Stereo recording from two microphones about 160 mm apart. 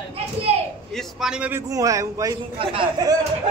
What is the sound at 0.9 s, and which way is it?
Speech, 5° right (ahead or behind).